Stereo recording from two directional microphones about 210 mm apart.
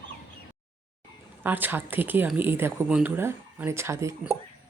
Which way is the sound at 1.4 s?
10° right (ahead or behind).